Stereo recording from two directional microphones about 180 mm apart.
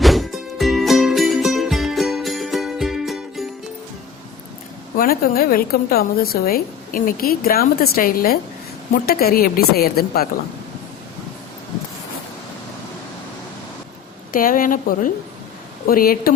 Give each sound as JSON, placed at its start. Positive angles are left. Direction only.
{"t": 0.0, "sound": "music", "side_deg": 0}
{"t": 4.9, "sound": "a woman's voice", "side_deg": 55}
{"t": 14.3, "sound": "a woman's voice", "side_deg": 50}